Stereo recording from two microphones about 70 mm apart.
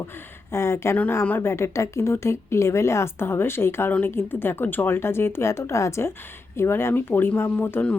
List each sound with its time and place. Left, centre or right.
0.5 s a woman's voice: left
0.9 s speech: left
1.4 s a woman's voice: left